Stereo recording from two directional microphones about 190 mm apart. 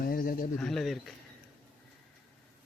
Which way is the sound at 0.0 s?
50° left (ahead or behind).